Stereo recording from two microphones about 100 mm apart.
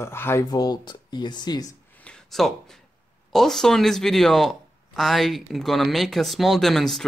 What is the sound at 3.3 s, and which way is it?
Speech, 5° left (ahead or behind).